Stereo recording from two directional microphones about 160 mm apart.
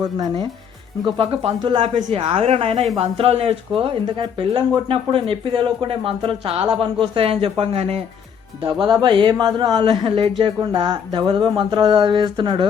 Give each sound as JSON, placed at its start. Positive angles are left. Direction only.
{"t": 0.0, "sound": "speech", "side_deg": -25}